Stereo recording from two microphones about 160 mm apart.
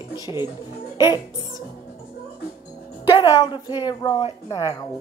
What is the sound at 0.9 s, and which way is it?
Speech, 25° left (ahead or behind).